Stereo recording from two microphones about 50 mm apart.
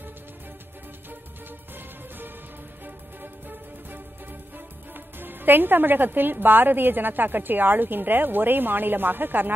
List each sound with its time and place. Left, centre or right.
1.8 s music: right